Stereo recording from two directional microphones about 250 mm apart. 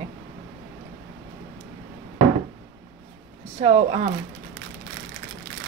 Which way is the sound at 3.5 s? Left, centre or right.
Right.